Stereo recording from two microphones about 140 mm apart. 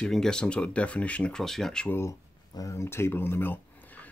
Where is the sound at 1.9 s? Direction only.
20° left (ahead or behind).